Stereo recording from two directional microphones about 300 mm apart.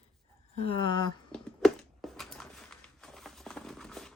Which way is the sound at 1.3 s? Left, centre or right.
Centre.